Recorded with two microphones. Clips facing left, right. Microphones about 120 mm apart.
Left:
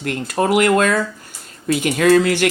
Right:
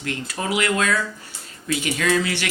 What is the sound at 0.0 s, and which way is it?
Speech, 50° left (ahead or behind).